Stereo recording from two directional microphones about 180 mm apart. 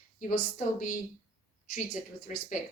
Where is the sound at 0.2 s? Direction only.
45° left (ahead or behind).